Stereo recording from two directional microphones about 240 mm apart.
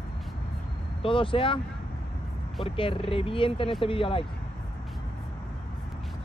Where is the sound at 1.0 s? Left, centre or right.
Left.